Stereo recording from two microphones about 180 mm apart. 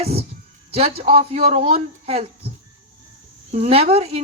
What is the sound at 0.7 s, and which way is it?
Speech, 35° right (ahead or behind).